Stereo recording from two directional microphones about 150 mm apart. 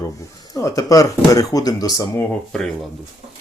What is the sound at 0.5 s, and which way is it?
Speech, 25° left (ahead or behind).